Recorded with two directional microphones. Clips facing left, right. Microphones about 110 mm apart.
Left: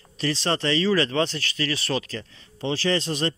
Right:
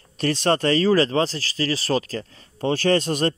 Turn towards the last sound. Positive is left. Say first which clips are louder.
# right 4 dB
turn(degrees=-50)  # may be behind; listen again after turning